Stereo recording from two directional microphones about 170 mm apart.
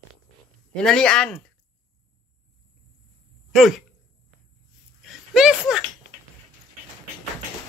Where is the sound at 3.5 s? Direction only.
Centre (ahead or behind).